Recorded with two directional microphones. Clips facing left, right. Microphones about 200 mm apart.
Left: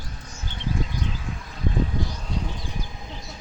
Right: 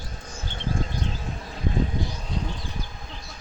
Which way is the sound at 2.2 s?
Centre (ahead or behind).